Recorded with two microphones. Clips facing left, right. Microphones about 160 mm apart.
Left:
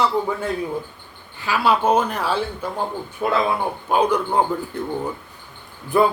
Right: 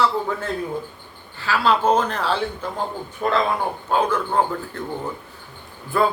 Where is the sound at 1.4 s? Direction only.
10° left (ahead or behind).